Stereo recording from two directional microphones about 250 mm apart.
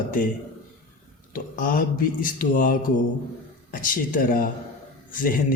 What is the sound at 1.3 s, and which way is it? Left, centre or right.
Speech, left.